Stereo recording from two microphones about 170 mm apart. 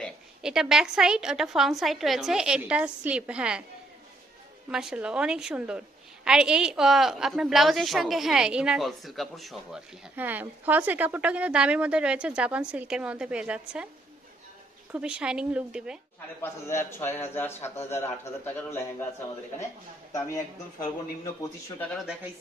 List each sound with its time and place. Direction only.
0.4 s a woman's voice: 5° right (ahead or behind)
4.7 s a woman's voice: 5° right (ahead or behind)
14.9 s a woman's voice: 5° right (ahead or behind)
17.0 s a man's voice: 15° left (ahead or behind)
21.9 s a woman's voice: 5° right (ahead or behind)